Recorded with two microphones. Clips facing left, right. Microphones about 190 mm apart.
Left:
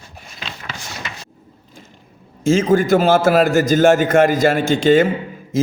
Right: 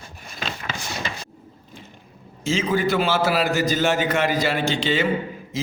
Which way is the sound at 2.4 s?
50° left (ahead or behind).